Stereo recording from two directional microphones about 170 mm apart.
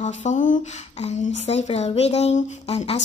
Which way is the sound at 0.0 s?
40° left (ahead or behind).